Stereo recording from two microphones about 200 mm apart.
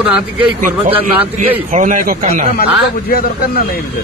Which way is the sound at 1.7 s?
40° right (ahead or behind).